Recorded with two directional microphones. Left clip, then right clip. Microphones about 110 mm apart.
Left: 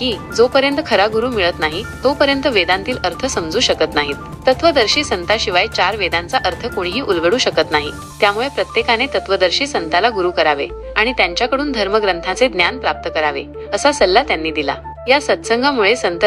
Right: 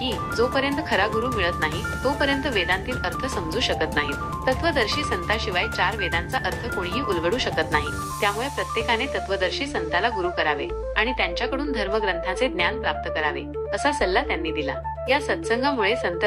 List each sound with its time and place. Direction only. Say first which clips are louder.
0.0 s speech: left 9 dB; 35° left (ahead or behind)